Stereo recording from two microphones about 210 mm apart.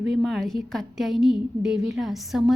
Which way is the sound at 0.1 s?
Centre (ahead or behind).